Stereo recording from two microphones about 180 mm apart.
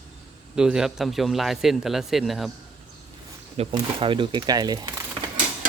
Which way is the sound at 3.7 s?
30° right (ahead or behind).